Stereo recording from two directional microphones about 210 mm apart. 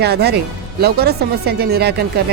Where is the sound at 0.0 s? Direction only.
50° right (ahead or behind).